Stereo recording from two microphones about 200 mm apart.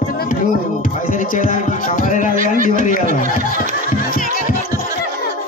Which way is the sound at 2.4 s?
40° right (ahead or behind).